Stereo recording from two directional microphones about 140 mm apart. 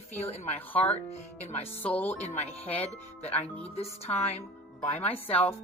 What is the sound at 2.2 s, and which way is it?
Speech, 50° left (ahead or behind).